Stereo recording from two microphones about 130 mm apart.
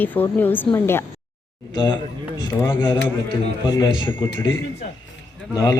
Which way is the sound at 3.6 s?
30° left (ahead or behind).